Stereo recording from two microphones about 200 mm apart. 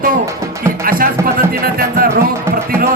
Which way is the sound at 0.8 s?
45° right (ahead or behind).